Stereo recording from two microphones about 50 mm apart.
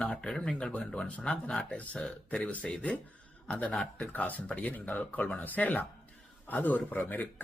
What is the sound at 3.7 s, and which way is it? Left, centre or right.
Speech, centre.